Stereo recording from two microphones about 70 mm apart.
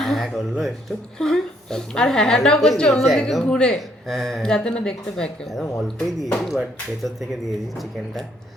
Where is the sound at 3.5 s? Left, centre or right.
Centre.